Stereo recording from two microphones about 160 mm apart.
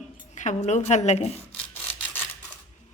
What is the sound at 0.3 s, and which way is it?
Speech, 45° left (ahead or behind).